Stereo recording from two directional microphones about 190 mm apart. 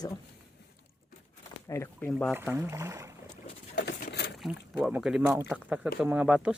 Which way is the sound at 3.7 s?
45° left (ahead or behind).